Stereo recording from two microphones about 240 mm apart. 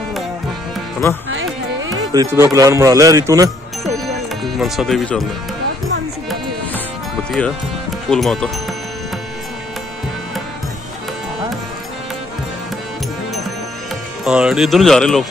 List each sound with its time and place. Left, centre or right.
1.3 s carnatic music: right
2.1 s speech: centre
4.0 s music: centre
7.2 s speech: centre
14.2 s speech: centre